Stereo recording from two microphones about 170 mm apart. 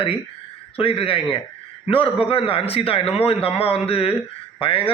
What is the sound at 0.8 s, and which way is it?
A man's voice, 30° left (ahead or behind).